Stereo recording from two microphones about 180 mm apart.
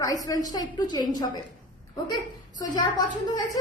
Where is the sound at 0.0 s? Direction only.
20° left (ahead or behind).